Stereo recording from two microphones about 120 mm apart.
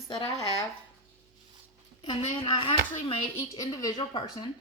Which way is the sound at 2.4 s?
45° left (ahead or behind).